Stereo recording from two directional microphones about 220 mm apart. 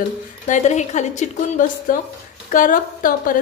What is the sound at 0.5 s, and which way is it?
A woman's voice, 30° left (ahead or behind).